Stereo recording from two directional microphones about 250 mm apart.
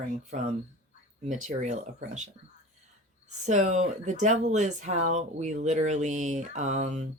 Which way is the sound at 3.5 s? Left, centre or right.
Right.